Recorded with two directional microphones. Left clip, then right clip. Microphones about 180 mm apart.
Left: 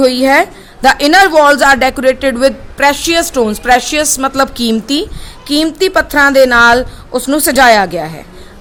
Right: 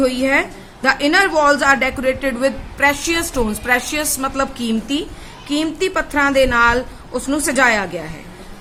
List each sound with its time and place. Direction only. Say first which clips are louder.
0.0 s a woman's voice: left 8 dB; 50° left (ahead or behind)